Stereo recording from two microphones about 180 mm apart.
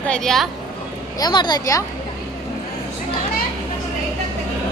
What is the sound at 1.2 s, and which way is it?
Speech, 25° left (ahead or behind).